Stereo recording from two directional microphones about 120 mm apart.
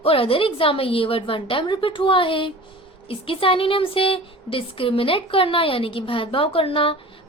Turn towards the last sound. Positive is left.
turn(degrees=50)  # may be behind; listen again after turning